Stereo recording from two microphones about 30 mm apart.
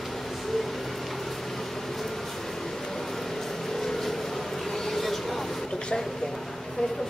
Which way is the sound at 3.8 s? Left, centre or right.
Centre.